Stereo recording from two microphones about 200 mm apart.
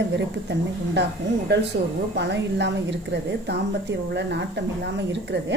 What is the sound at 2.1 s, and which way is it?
A woman's voice, 60° right (ahead or behind).